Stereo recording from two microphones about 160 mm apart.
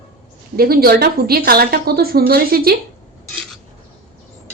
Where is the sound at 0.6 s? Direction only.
70° right (ahead or behind).